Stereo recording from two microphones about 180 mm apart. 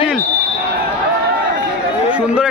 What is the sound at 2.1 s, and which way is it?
Speech, 5° right (ahead or behind).